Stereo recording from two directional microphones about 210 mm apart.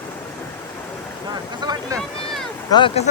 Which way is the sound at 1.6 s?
20° right (ahead or behind).